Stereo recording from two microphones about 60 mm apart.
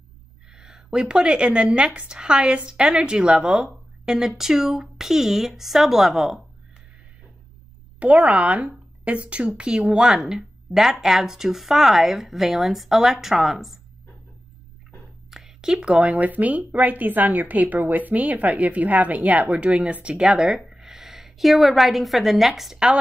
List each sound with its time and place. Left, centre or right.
0.5 s speech: centre
8.0 s speech: right; by 13.7 s centre
15.3 s speech: centre